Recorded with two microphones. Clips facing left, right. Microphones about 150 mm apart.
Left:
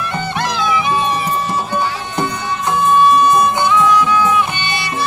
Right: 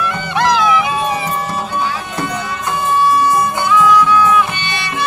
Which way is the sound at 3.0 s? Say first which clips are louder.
Left 1 dB; 20° left (ahead or behind).